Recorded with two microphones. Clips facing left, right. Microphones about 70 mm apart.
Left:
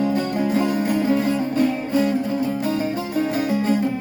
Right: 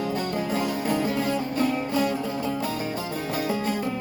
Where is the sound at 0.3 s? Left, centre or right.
Left.